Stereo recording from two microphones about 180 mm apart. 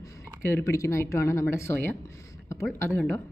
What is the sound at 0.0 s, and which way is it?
Speech, 15° left (ahead or behind).